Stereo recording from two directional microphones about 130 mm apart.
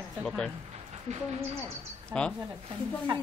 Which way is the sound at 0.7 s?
55° right (ahead or behind).